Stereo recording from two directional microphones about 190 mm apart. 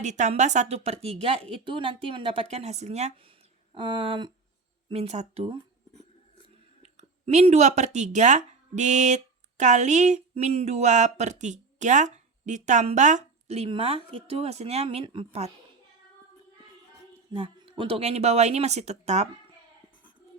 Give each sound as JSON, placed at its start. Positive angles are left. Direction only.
{"t": 0.0, "sound": "speech", "side_deg": -40}
{"t": 3.8, "sound": "speech", "side_deg": -25}
{"t": 6.8, "sound": "speech", "side_deg": -35}
{"t": 17.3, "sound": "speech", "side_deg": -25}